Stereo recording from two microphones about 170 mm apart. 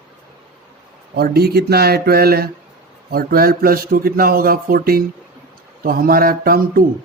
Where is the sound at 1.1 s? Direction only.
65° right (ahead or behind).